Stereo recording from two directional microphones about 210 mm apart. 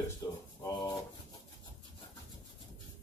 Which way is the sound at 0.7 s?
15° left (ahead or behind).